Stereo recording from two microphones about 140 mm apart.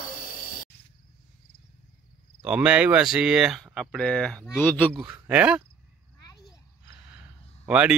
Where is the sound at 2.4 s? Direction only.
5° right (ahead or behind); by 4.9 s 15° left (ahead or behind).